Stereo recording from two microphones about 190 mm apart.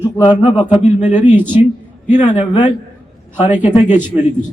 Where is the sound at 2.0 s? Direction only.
40° left (ahead or behind).